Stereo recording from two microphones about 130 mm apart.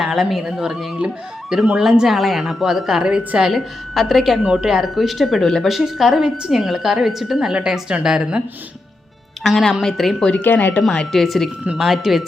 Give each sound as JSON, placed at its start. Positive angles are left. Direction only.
{"t": 0.0, "sound": "speech", "side_deg": 0}
{"t": 9.4, "sound": "speech", "side_deg": 0}